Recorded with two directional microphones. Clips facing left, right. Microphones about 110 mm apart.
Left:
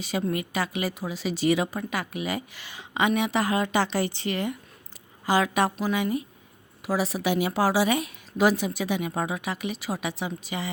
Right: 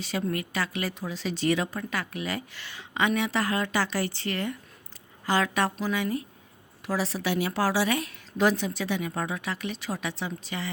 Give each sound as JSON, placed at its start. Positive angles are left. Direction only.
{"t": 0.0, "sound": "a woman's voice", "side_deg": 15}